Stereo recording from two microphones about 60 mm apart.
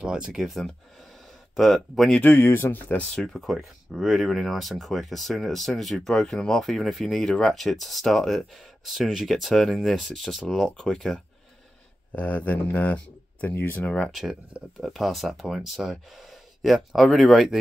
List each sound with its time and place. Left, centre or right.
0.0 s speech: centre
2.2 s speech: left
3.0 s speech: centre
3.4 s speech: centre
12.2 s speech: left
13.6 s speech: left
13.8 s speech: left
14.8 s speech: centre